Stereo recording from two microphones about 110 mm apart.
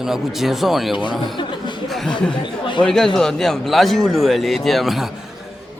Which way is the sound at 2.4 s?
45° left (ahead or behind).